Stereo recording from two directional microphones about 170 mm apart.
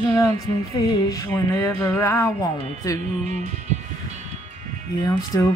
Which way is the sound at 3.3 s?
45° right (ahead or behind).